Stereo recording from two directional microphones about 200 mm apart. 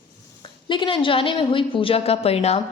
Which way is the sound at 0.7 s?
25° left (ahead or behind).